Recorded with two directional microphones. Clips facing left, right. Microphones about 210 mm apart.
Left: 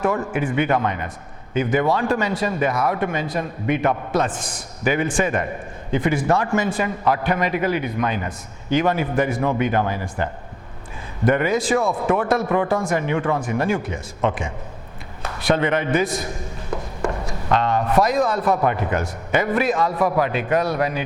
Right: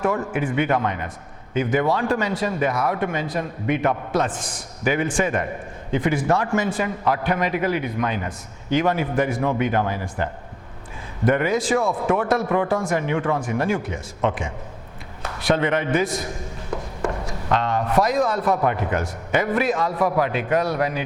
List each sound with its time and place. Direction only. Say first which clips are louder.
0.0 s speech: left 1 dB; 15° left (ahead or behind)
11.3 s a man's voice: left 1 dB; 10° left (ahead or behind)
16.6 s a sound: left 1 dB; 20° left (ahead or behind)
17.6 s speech: left 2 dB; 15° left (ahead or behind)